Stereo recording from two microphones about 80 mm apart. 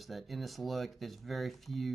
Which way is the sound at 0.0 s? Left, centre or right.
Centre.